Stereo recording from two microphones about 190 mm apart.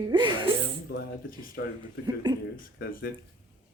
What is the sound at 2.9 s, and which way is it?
Speech, 50° left (ahead or behind).